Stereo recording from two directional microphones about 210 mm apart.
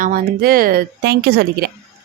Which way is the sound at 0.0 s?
45° right (ahead or behind).